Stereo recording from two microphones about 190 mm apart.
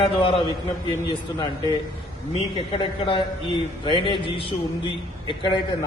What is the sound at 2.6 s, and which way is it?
A man's voice, 25° left (ahead or behind).